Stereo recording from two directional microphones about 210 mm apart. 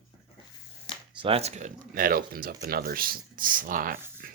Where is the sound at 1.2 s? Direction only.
25° right (ahead or behind).